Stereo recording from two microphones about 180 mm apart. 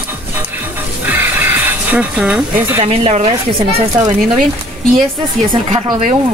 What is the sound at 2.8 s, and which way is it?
Speech, 35° right (ahead or behind).